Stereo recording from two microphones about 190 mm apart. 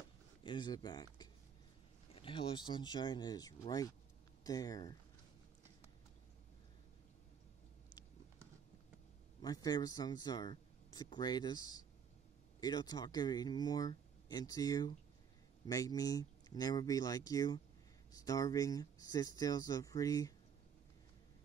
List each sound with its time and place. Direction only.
0.4 s speech: 25° left (ahead or behind)
9.4 s speech: 20° left (ahead or behind)